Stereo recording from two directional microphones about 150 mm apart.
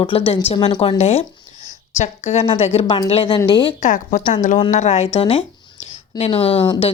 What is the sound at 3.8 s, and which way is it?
Speech, 60° left (ahead or behind).